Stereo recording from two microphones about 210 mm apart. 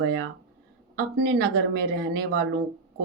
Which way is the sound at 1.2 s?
50° right (ahead or behind).